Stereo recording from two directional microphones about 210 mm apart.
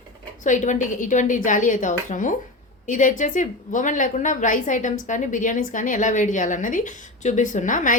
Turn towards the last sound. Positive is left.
turn(degrees=40)  # may be behind; listen again after turning